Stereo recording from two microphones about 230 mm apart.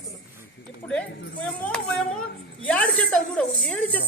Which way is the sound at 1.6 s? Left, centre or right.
Centre.